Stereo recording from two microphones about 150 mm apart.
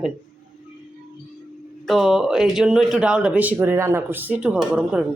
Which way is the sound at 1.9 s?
Centre (ahead or behind).